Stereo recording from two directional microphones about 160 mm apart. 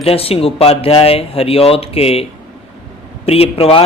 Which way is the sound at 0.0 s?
35° left (ahead or behind).